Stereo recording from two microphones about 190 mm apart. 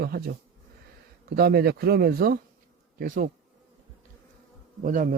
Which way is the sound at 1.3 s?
55° right (ahead or behind).